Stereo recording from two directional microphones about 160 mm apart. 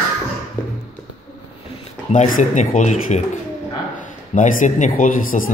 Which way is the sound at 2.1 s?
50° left (ahead or behind).